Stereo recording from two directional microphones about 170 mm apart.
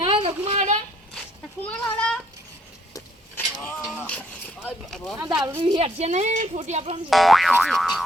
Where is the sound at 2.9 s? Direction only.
10° left (ahead or behind).